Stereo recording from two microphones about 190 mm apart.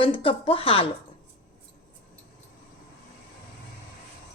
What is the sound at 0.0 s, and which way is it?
Speech, 30° left (ahead or behind).